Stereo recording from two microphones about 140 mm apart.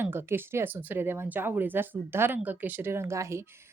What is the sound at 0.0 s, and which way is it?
A woman's voice, 15° right (ahead or behind).